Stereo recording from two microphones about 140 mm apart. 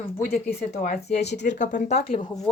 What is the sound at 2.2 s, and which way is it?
Speech, 30° left (ahead or behind).